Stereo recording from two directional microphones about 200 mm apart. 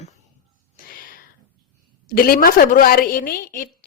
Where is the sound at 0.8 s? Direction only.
45° left (ahead or behind).